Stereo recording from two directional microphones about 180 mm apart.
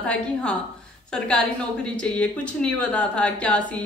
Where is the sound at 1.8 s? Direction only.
5° left (ahead or behind).